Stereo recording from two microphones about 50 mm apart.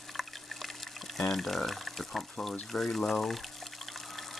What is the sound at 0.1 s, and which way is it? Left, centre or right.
Water, centre.